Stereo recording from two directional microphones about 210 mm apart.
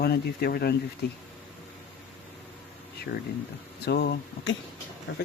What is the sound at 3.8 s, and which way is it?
Speech, 50° left (ahead or behind).